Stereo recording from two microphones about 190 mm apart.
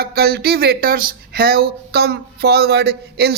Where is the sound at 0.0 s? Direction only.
55° right (ahead or behind).